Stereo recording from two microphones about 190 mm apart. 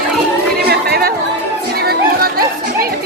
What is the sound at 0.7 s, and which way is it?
Chatter, 55° right (ahead or behind).